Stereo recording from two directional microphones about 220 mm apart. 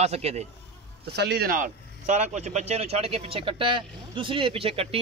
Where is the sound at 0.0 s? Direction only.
30° right (ahead or behind).